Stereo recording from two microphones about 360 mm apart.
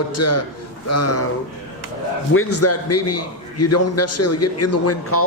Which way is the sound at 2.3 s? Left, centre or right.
Left.